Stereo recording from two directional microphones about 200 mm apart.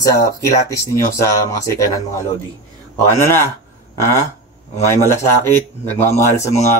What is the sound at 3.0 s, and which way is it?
Speech, 15° left (ahead or behind).